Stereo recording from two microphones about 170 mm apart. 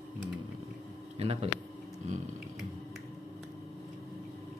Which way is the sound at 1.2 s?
35° right (ahead or behind).